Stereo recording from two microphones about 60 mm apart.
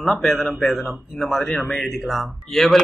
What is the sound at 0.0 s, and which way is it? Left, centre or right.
A man's voice, centre.